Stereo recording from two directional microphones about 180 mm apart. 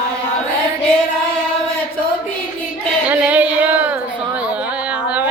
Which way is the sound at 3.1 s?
10° right (ahead or behind).